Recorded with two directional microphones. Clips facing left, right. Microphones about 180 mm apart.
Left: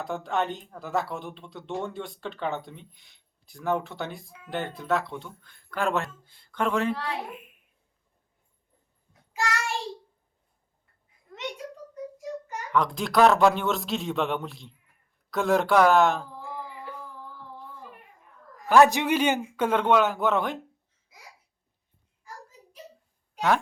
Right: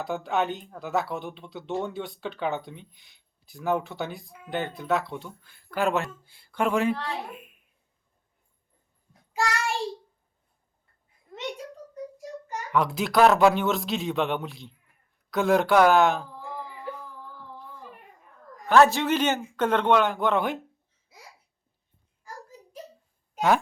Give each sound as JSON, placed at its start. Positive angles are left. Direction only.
{"t": 0.0, "sound": "speech", "side_deg": 0}
{"t": 6.9, "sound": "a man's voice", "side_deg": 10}
{"t": 12.7, "sound": "speech", "side_deg": -5}
{"t": 18.6, "sound": "a man's voice", "side_deg": 10}